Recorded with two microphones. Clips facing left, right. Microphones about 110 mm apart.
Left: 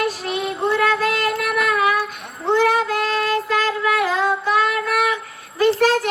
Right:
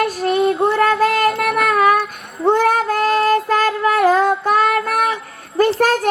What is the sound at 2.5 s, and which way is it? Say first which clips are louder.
Female singing: right 2 dB; 50° right (ahead or behind).